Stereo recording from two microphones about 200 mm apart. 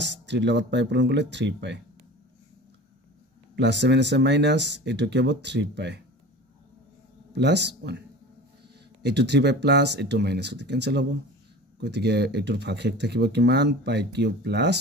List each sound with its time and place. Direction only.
0.0 s speech: 60° right (ahead or behind)
3.5 s speech: 60° right (ahead or behind)
7.3 s speech: 60° right (ahead or behind)
9.0 s speech: 60° right (ahead or behind)